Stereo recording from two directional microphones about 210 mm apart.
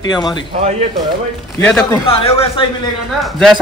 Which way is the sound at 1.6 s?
5° left (ahead or behind).